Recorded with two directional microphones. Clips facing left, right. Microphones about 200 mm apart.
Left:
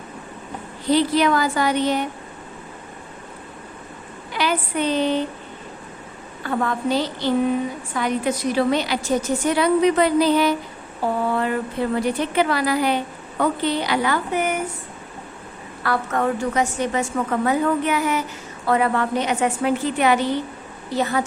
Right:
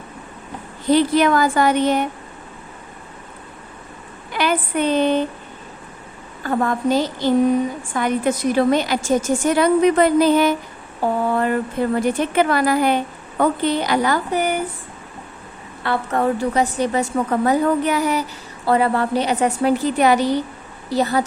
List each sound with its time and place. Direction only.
0.9 s a woman's voice: 50° right (ahead or behind)
4.4 s speech: 50° right (ahead or behind)
6.4 s a woman's voice: 40° right (ahead or behind)
15.8 s a woman's voice: 30° right (ahead or behind)